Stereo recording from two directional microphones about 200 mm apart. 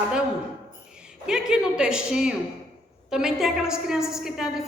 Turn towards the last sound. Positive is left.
turn(degrees=-5)  # may be behind; listen again after turning